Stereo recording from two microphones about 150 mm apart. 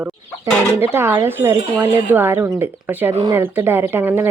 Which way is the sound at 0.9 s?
15° right (ahead or behind).